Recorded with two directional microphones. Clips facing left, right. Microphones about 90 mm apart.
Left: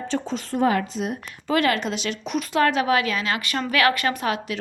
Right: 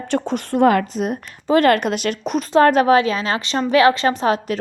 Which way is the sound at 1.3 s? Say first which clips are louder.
Right 7 dB; 30° right (ahead or behind).